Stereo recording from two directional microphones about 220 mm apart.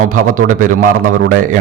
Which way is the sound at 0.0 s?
35° right (ahead or behind).